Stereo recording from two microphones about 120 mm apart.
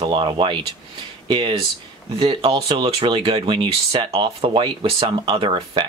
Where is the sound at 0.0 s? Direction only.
40° right (ahead or behind).